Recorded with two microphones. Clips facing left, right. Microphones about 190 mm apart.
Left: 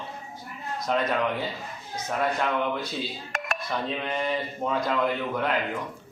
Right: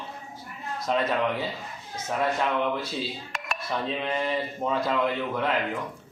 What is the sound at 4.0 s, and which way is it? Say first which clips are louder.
Speech: right 1 dB; centre (ahead or behind).